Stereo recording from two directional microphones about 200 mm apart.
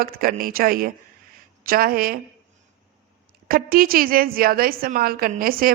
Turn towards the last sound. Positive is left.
turn(degrees=-45)  # may be behind; listen again after turning